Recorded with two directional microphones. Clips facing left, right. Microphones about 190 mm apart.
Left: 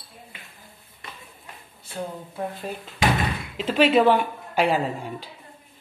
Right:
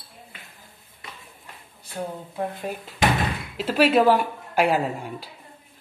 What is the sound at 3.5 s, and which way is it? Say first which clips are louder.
Speech: even; 5° right (ahead or behind).